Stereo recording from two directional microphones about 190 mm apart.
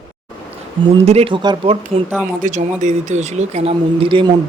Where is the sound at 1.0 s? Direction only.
35° right (ahead or behind).